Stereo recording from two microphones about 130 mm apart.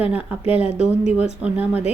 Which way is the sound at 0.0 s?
10° right (ahead or behind).